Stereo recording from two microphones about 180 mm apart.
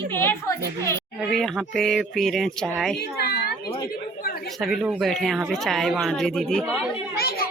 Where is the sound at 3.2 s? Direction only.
60° left (ahead or behind).